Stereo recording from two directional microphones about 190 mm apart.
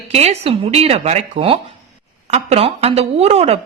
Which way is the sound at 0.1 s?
35° right (ahead or behind).